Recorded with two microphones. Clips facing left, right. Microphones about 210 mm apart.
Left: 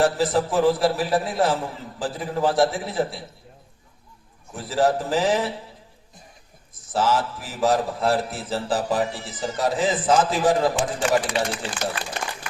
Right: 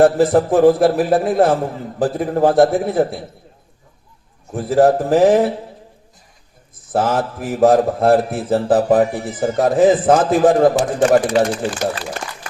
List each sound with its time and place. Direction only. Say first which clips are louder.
0.0 s a man's voice: right 8 dB; 55° right (ahead or behind)
4.5 s a man's voice: right 8 dB; 55° right (ahead or behind)
6.9 s a man's voice: right 4 dB; 55° right (ahead or behind)